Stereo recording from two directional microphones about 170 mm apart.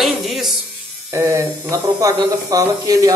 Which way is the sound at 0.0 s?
Centre (ahead or behind).